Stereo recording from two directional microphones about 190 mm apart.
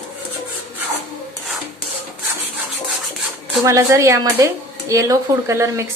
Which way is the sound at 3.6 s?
15° right (ahead or behind).